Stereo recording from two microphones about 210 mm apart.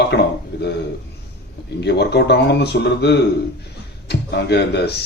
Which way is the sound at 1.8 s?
50° left (ahead or behind).